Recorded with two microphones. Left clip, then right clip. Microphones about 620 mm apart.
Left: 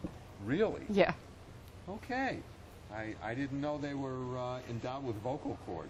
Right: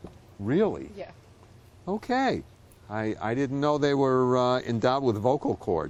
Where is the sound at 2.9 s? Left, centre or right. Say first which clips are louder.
Right 11 dB; right.